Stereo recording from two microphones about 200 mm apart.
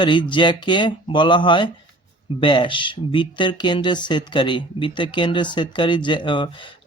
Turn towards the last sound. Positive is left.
turn(degrees=25)  # may be behind; listen again after turning